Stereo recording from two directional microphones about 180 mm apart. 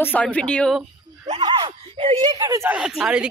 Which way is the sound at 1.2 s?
30° right (ahead or behind).